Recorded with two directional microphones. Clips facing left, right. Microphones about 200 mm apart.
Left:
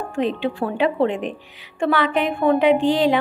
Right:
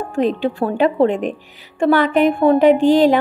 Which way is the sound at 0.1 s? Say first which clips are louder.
Right 4 dB; 40° right (ahead or behind).